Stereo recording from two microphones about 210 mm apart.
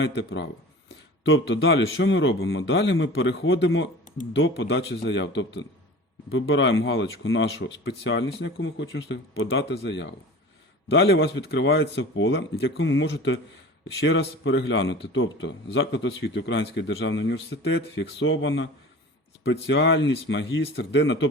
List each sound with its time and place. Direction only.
0.0 s speech: 55° left (ahead or behind)